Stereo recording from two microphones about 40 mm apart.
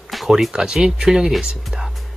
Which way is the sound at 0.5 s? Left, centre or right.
Centre.